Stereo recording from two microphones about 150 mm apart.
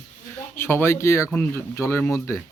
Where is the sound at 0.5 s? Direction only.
15° left (ahead or behind).